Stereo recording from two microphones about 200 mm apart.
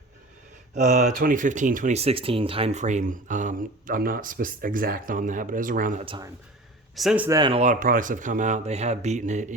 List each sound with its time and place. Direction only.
0.7 s speech: 35° right (ahead or behind)
6.1 s speech: 20° right (ahead or behind)
6.9 s speech: centre (ahead or behind)
7.3 s speech: 20° right (ahead or behind)
7.6 s speech: 40° right (ahead or behind)